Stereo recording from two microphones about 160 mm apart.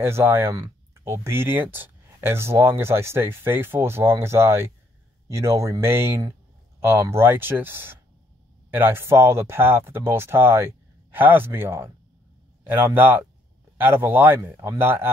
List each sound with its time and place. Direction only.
0.0 s speech: 15° right (ahead or behind)